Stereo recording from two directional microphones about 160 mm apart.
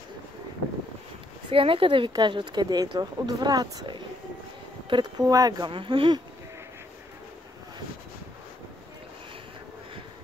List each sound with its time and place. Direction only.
1.5 s speech: 35° right (ahead or behind)